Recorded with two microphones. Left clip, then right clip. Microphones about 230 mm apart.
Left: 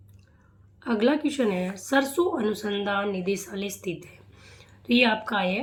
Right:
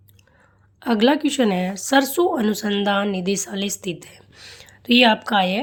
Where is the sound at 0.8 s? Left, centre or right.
Right.